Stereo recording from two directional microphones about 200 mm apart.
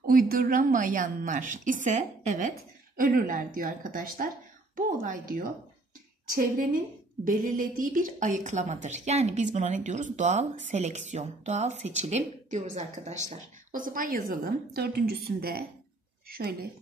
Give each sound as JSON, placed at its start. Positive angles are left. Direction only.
{"t": 0.3, "sound": "a woman's voice", "side_deg": -45}
{"t": 7.2, "sound": "a woman's voice", "side_deg": -45}